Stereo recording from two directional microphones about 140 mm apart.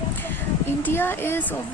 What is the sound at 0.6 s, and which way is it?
Speech, 15° left (ahead or behind).